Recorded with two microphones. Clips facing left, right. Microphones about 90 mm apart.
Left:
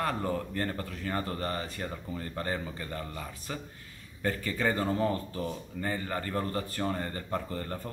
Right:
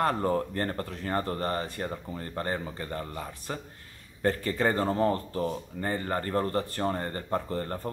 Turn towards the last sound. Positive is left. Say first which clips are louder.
# right 4 dB
turn(degrees=-35)  # may be behind; listen again after turning